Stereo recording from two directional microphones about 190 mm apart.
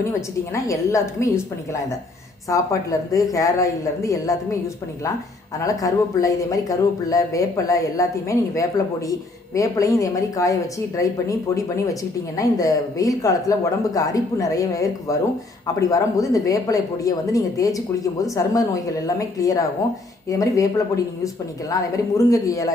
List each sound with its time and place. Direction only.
0.1 s speech: 15° left (ahead or behind)
2.5 s speech: 15° left (ahead or behind)
5.6 s speech: 15° left (ahead or behind)